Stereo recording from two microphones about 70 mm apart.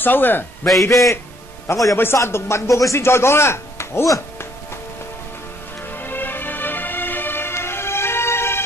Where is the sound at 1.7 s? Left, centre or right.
Left.